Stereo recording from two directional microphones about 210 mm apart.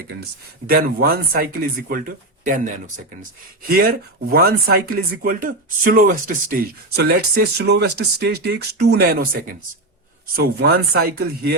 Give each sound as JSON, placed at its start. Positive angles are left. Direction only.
{"t": 0.7, "sound": "speech", "side_deg": -45}
{"t": 10.3, "sound": "speech", "side_deg": -45}